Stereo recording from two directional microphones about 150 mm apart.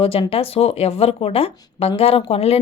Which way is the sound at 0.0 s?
40° left (ahead or behind).